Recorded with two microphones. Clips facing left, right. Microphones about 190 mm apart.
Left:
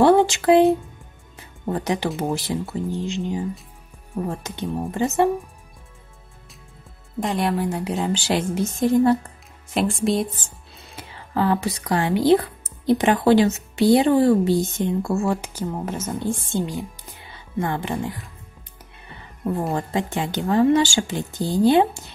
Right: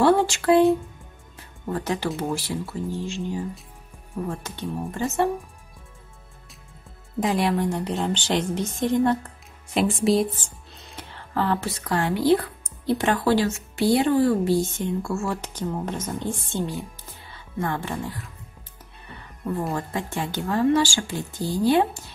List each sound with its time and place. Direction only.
0.0 s speech: 20° left (ahead or behind)
1.7 s speech: 20° left (ahead or behind)
7.2 s speech: centre (ahead or behind)
10.8 s speech: 10° left (ahead or behind)
15.2 s a woman's voice: 5° left (ahead or behind)
19.7 s speech: 20° left (ahead or behind)